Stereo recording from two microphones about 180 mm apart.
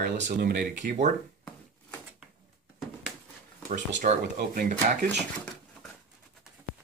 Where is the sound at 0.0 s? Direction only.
55° right (ahead or behind).